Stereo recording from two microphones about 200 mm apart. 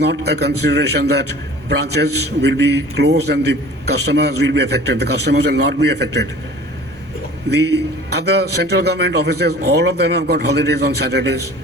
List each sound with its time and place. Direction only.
0.0 s a man's voice: 55° right (ahead or behind)
7.5 s a man's voice: 55° right (ahead or behind)